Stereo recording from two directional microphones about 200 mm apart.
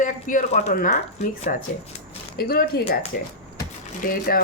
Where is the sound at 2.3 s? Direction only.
50° left (ahead or behind).